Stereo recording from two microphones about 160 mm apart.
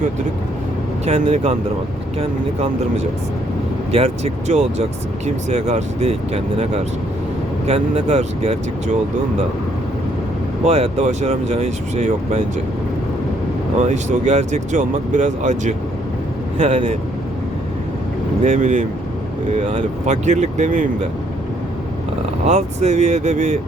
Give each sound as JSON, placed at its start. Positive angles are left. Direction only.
{"t": 1.0, "sound": "speech", "side_deg": -45}
{"t": 3.9, "sound": "speech", "side_deg": -40}
{"t": 10.7, "sound": "speech", "side_deg": -40}
{"t": 13.7, "sound": "speech", "side_deg": -50}
{"t": 18.4, "sound": "speech", "side_deg": -50}
{"t": 22.4, "sound": "speech", "side_deg": -45}